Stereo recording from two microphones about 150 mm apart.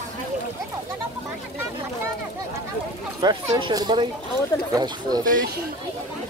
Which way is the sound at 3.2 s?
25° right (ahead or behind).